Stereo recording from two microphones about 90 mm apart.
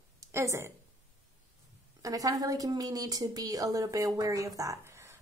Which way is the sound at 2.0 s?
40° right (ahead or behind).